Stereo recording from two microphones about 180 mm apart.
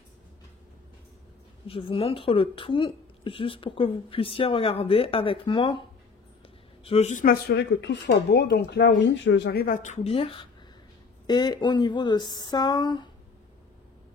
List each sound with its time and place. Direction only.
1.7 s speech: 30° left (ahead or behind)
7.4 s speech: 75° left (ahead or behind); by 9.8 s 60° left (ahead or behind)
9.8 s speech: 35° left (ahead or behind)